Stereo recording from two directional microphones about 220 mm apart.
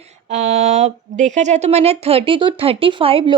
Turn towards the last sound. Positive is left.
turn(degrees=-25)  # may be behind; listen again after turning